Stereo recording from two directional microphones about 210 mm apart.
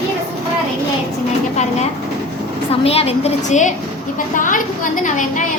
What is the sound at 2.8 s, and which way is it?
A woman's voice, 30° left (ahead or behind).